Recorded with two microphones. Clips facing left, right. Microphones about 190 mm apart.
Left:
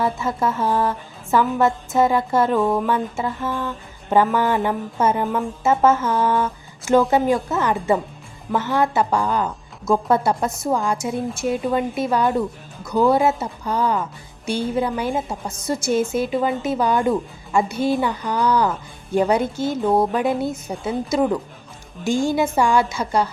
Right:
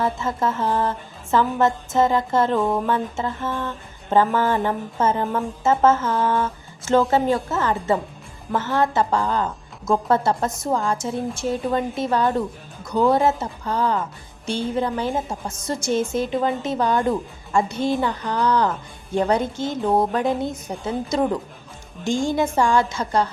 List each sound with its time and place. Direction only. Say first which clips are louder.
0.3 s a woman's voice: left 2 dB; 15° left (ahead or behind)